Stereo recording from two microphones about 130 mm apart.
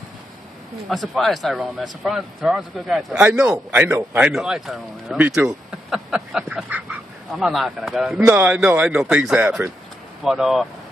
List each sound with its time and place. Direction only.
0.8 s a man's voice: centre (ahead or behind)
3.7 s speech: 15° right (ahead or behind)
4.3 s a man's voice: centre (ahead or behind)
8.3 s a man's voice: 15° right (ahead or behind)